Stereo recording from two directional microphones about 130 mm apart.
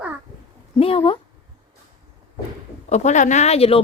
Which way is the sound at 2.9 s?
65° left (ahead or behind).